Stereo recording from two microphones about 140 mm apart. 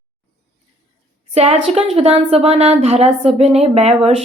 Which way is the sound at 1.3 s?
50° right (ahead or behind).